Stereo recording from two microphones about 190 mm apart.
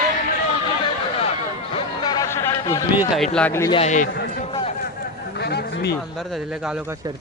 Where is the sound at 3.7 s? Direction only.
35° left (ahead or behind).